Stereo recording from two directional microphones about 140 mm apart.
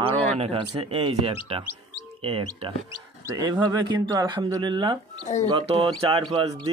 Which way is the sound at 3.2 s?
25° right (ahead or behind).